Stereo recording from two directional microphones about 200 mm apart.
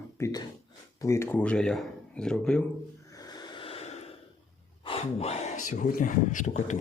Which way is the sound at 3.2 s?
20° left (ahead or behind).